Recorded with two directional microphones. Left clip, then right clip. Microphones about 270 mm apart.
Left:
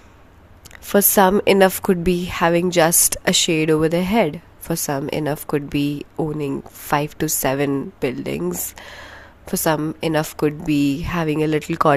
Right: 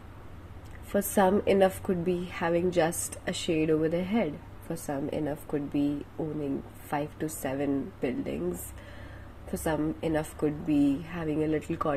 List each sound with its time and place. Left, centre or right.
0.9 s a woman's voice: left
6.9 s a woman's voice: left